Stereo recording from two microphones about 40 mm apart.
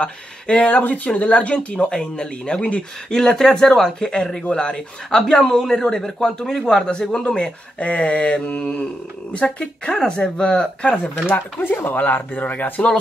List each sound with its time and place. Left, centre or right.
0.0 s speech: left
1.0 s speech: left
3.1 s a man's voice: centre
11.2 s speech: left